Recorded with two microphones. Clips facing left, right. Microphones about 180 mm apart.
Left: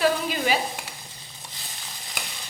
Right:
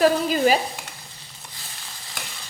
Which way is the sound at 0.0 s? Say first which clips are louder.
Right 5 dB; 40° right (ahead or behind).